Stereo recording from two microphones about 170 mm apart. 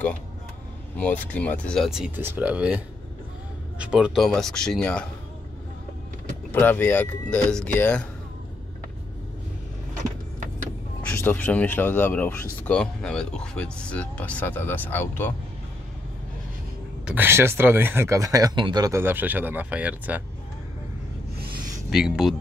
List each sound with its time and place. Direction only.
0.9 s speech: 10° left (ahead or behind)
6.5 s speech: 10° left (ahead or behind)
11.0 s speech: 10° left (ahead or behind)
17.0 s speech: 10° right (ahead or behind)
21.4 s a sound: 55° right (ahead or behind)
21.9 s speech: 5° right (ahead or behind)